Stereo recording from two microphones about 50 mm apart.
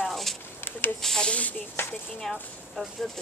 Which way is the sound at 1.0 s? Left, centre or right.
Centre.